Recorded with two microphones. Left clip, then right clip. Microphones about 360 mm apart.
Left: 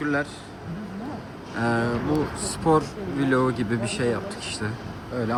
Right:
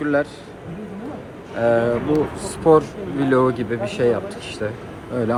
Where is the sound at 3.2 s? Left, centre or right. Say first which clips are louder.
Right 5 dB; centre.